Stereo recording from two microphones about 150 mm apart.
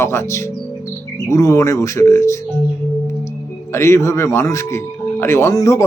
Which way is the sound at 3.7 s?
20° left (ahead or behind).